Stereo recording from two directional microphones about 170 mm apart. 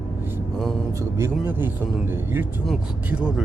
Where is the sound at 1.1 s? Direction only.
15° right (ahead or behind).